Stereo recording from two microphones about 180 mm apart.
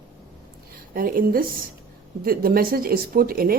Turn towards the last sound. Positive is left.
turn(degrees=-55)  # may be behind; listen again after turning